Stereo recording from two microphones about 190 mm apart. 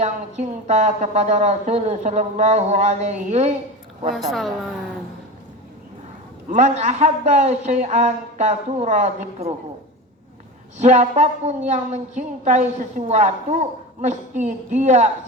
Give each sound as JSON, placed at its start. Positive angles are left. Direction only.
{"t": 0.0, "sound": "a woman's voice", "side_deg": -35}
{"t": 4.1, "sound": "speech", "side_deg": 0}
{"t": 6.5, "sound": "a woman's voice", "side_deg": -40}
{"t": 10.8, "sound": "a woman's voice", "side_deg": -40}